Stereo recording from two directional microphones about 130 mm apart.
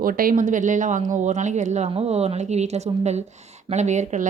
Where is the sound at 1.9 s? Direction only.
50° right (ahead or behind).